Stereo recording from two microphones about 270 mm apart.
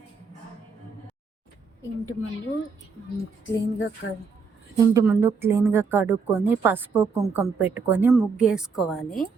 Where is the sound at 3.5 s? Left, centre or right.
Left.